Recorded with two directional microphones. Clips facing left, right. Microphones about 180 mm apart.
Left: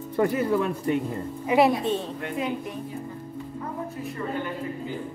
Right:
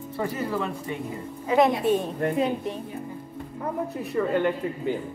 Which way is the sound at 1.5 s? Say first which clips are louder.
Even; 15° left (ahead or behind).